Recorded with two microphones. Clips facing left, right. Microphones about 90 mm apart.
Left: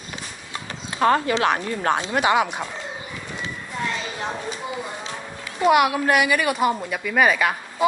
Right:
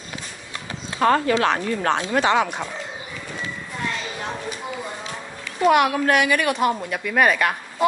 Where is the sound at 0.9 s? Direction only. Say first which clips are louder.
Right 1 dB; 20° left (ahead or behind).